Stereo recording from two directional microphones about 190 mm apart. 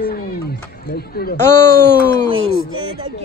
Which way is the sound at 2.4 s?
90° right.